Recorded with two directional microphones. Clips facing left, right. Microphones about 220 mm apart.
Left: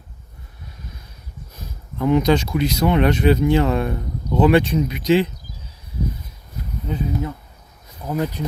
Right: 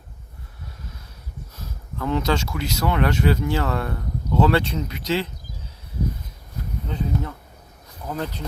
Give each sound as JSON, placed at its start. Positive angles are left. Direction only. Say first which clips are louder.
{"t": 1.5, "sound": "speech", "louder": "left 5 dB", "side_deg": 15}
{"t": 6.8, "sound": "speech", "louder": "left 3 dB", "side_deg": 10}